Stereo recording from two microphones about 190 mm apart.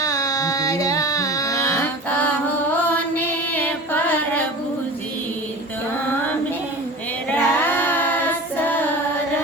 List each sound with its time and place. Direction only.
0.0 s music: 20° left (ahead or behind)
3.2 s music: 10° left (ahead or behind)
7.3 s child singing: 10° left (ahead or behind)